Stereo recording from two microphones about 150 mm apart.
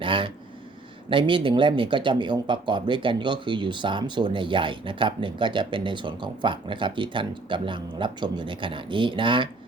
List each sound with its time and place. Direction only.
0.0 s speech: 35° right (ahead or behind)